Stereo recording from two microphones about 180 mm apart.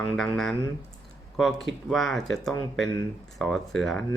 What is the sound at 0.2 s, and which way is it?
Speech, centre (ahead or behind).